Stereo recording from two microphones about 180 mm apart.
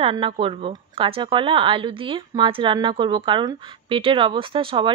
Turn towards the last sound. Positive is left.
turn(degrees=-30)  # may be behind; listen again after turning